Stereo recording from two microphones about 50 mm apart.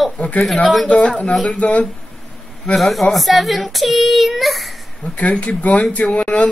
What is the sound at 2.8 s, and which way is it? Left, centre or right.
A woman's voice, centre.